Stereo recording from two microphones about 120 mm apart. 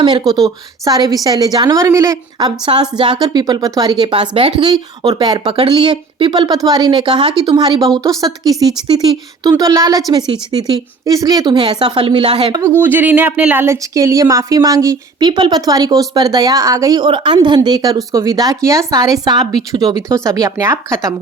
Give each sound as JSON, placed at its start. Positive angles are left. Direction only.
{"t": 0.0, "sound": "speech", "side_deg": -35}
{"t": 2.6, "sound": "speech", "side_deg": -40}
{"t": 5.5, "sound": "speech", "side_deg": -45}
{"t": 11.9, "sound": "speech", "side_deg": -50}
{"t": 12.8, "sound": "speech", "side_deg": -15}